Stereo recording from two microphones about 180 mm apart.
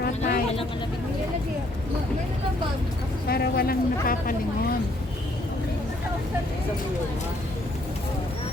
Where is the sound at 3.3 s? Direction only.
60° left (ahead or behind).